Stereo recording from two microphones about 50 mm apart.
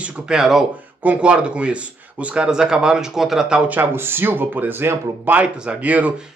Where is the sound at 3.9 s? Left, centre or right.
Right.